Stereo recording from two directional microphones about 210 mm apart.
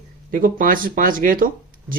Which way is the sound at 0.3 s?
40° right (ahead or behind).